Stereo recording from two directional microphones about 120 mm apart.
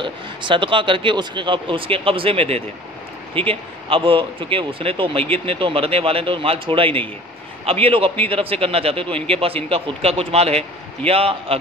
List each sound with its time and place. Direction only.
0.0 s speech: 45° right (ahead or behind)